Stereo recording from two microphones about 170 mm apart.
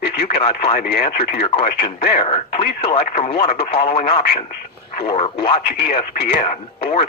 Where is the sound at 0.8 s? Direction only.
70° left (ahead or behind).